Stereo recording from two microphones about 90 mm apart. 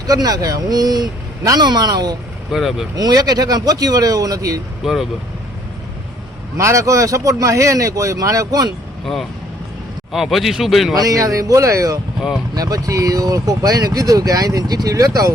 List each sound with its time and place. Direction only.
0.1 s speech: 45° right (ahead or behind)
2.5 s speech: 5° right (ahead or behind)
2.9 s speech: 45° right (ahead or behind)
4.8 s speech: 5° right (ahead or behind)
6.6 s speech: 35° right (ahead or behind)
10.1 s speech: centre (ahead or behind)
10.9 s speech: 40° right (ahead or behind)